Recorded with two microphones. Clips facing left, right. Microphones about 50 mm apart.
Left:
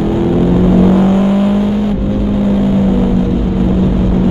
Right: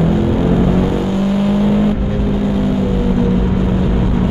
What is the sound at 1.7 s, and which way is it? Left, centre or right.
Vehicle, centre.